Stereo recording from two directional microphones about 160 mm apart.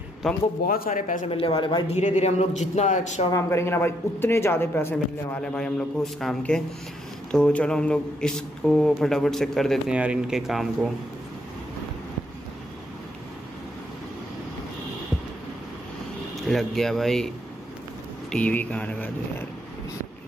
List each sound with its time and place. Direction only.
0.2 s speech: centre (ahead or behind)
0.7 s speech: 60° left (ahead or behind)
1.3 s speech: 35° left (ahead or behind)
2.0 s a man's voice: 45° left (ahead or behind)
3.3 s speech: 20° left (ahead or behind); by 10.9 s centre (ahead or behind)
16.4 s speech: centre (ahead or behind)
18.3 s speech: 10° left (ahead or behind)